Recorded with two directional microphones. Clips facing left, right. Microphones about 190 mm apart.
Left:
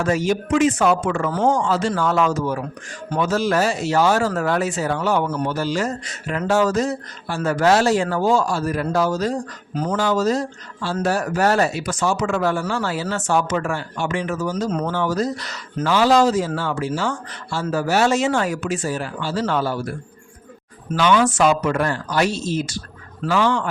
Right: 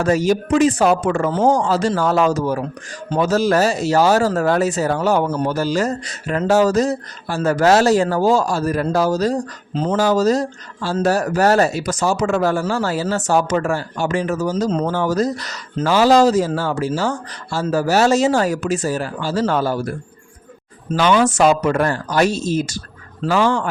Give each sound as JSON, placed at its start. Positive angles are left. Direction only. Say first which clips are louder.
{"t": 0.0, "sound": "speech", "louder": "right 3 dB", "side_deg": -40}
{"t": 9.7, "sound": "speech", "louder": "right 3 dB", "side_deg": -25}
{"t": 10.0, "sound": "speech", "louder": "right 4 dB", "side_deg": -40}
{"t": 14.7, "sound": "speech", "louder": "right 4 dB", "side_deg": -30}
{"t": 14.9, "sound": "speech", "louder": "right 3 dB", "side_deg": -40}
{"t": 20.9, "sound": "speech", "louder": "right 2 dB", "side_deg": -45}